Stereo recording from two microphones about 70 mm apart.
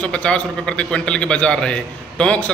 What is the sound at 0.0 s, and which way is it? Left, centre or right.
A man's voice, centre.